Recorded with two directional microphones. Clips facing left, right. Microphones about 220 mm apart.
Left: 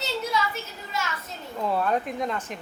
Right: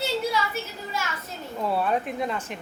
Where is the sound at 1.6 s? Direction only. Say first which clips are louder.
Even; 5° right (ahead or behind).